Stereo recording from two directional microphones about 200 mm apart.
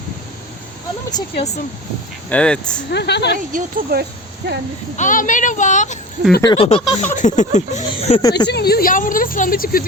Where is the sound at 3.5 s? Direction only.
50° right (ahead or behind).